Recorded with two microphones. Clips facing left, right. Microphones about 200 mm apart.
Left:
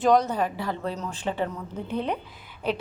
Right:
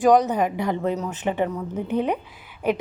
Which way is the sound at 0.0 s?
15° right (ahead or behind).